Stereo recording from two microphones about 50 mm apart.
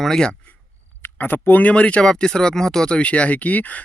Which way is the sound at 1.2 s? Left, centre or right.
Left.